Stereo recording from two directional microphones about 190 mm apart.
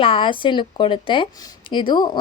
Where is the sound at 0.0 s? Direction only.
25° left (ahead or behind).